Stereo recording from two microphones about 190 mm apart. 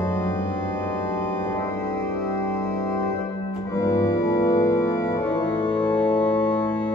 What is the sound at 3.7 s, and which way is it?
Organ, 15° left (ahead or behind).